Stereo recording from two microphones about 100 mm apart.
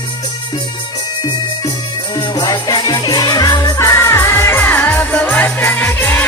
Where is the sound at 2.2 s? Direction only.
45° left (ahead or behind).